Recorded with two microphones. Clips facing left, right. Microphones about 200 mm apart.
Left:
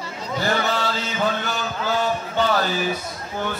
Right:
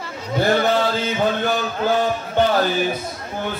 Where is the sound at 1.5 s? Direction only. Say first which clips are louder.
Right 5 dB; 50° right (ahead or behind).